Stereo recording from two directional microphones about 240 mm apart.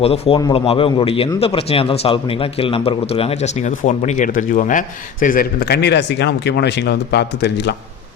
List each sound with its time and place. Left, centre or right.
0.0 s a man's voice: left